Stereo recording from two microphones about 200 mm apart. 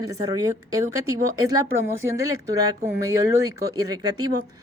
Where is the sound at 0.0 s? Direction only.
15° right (ahead or behind).